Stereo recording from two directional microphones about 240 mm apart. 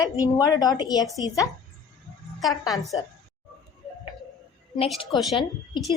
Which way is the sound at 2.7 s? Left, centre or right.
Centre.